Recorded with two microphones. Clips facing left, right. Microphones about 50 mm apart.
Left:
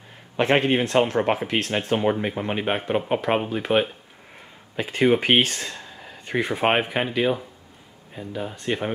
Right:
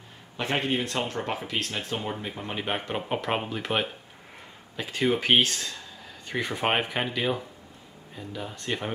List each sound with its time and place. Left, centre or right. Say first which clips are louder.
0.4 s speech: left 8 dB; left
1.0 s speech: left 9 dB; left
2.6 s speech: left 5 dB; centre
4.7 s speech: left 6 dB; left